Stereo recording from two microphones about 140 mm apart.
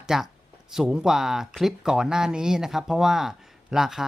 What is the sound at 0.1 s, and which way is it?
Speech, 5° right (ahead or behind).